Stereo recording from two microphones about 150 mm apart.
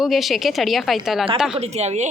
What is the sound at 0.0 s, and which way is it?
A woman's voice, centre (ahead or behind).